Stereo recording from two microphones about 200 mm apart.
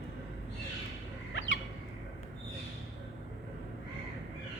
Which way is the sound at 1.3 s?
70° left (ahead or behind).